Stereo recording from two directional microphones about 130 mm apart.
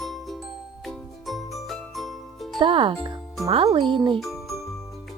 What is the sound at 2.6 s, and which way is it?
Speech, 40° right (ahead or behind).